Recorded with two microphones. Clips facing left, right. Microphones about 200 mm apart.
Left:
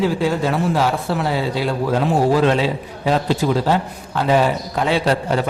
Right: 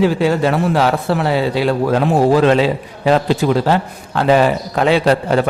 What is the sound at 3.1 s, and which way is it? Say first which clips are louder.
A man's voice: right 4 dB; 70° right (ahead or behind).